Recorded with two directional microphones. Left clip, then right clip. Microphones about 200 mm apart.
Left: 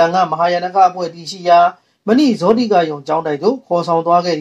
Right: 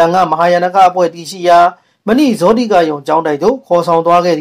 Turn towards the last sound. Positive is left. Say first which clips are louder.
# right 4 dB
turn(degrees=-30)  # may be behind; listen again after turning